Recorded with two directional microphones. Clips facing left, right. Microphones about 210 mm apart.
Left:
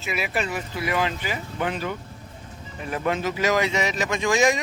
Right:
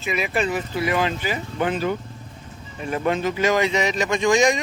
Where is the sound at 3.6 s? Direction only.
20° right (ahead or behind).